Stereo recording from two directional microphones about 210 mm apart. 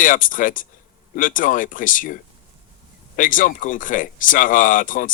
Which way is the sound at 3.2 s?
40° left (ahead or behind).